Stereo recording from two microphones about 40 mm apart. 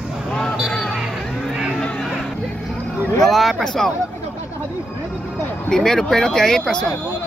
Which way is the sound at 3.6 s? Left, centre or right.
Centre.